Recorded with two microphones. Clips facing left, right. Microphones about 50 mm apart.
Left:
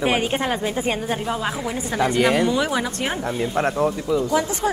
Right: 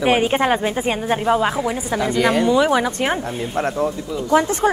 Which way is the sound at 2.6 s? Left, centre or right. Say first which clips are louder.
Right 6 dB; right.